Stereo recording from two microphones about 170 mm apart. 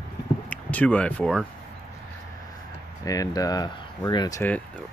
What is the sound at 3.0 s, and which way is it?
Speech, 20° left (ahead or behind).